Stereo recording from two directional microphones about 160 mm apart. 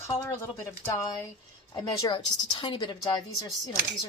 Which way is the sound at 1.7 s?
30° left (ahead or behind).